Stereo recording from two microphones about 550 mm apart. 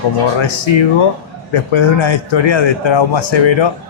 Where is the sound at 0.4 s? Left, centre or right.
Left.